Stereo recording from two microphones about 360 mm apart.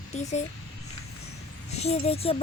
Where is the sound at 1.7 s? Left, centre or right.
Centre.